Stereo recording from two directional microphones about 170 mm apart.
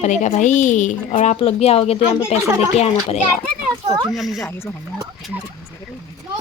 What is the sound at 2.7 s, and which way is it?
Speech, 40° left (ahead or behind).